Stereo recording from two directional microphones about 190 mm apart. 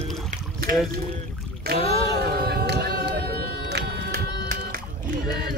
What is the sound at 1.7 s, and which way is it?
Music, 60° right (ahead or behind).